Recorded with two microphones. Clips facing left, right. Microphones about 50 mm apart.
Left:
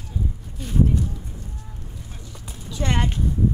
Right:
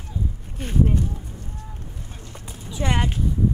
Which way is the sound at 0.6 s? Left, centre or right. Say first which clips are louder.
Even; right.